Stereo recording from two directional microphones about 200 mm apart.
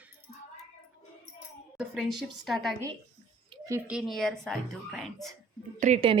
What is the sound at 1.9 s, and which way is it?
A woman's voice, centre (ahead or behind).